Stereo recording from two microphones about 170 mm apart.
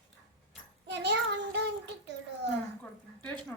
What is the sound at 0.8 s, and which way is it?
Child singing, 90° right.